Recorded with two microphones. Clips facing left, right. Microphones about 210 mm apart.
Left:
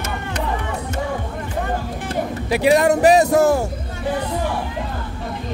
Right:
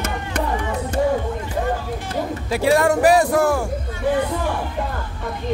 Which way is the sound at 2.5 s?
15° left (ahead or behind).